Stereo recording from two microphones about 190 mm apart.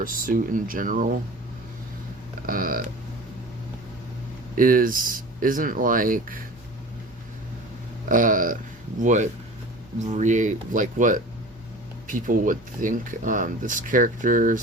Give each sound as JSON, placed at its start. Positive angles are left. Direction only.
{"t": 0.0, "sound": "speech", "side_deg": -45}
{"t": 2.5, "sound": "speech", "side_deg": -50}
{"t": 4.5, "sound": "speech", "side_deg": -45}
{"t": 8.1, "sound": "speech", "side_deg": -45}